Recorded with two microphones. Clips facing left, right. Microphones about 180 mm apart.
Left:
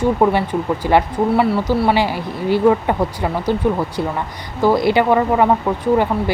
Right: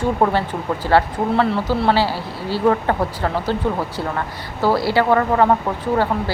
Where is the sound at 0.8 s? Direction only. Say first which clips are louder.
Left 1 dB; 10° left (ahead or behind).